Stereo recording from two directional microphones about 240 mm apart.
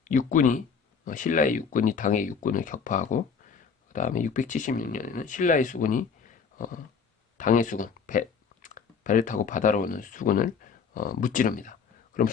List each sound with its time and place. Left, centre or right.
0.0 s speech: left
7.3 s speech: left